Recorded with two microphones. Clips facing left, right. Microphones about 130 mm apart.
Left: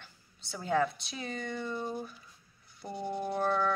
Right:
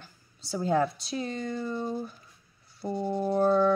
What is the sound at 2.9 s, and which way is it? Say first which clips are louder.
Music: right 6 dB; 30° right (ahead or behind).